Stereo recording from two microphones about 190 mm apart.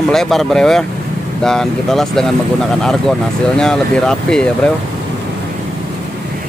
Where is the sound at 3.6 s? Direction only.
5° left (ahead or behind).